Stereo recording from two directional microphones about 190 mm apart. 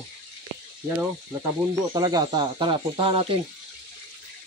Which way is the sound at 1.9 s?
20° right (ahead or behind).